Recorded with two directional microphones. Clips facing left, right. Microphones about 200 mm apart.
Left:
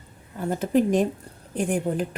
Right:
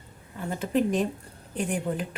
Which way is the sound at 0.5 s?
45° left (ahead or behind).